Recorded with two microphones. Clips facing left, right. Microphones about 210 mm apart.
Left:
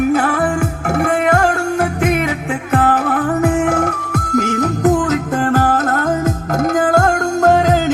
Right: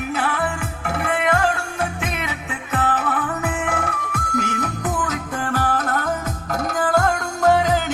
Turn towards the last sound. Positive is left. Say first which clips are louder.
# left 5 dB
turn(degrees=45)  # may be behind; listen again after turning